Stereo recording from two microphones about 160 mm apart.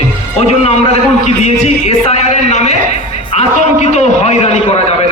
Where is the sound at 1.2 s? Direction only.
40° left (ahead or behind).